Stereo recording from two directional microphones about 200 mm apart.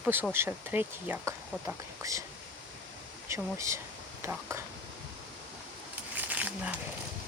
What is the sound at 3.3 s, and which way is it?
Speech, 15° right (ahead or behind).